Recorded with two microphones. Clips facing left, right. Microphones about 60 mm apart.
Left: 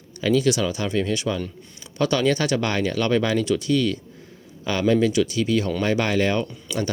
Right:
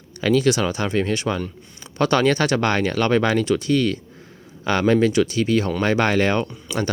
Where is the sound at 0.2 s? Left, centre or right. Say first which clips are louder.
Right 2 dB; right.